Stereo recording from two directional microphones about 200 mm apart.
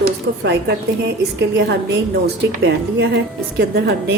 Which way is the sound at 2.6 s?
55° right (ahead or behind).